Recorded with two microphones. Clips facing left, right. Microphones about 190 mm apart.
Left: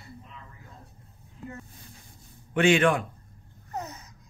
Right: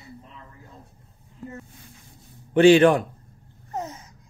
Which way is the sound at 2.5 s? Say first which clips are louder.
Right 7 dB; 35° right (ahead or behind).